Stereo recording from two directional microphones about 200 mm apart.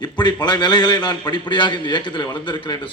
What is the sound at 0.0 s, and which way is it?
A man's voice, 20° left (ahead or behind).